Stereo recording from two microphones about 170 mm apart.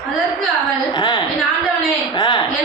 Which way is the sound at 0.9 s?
25° left (ahead or behind).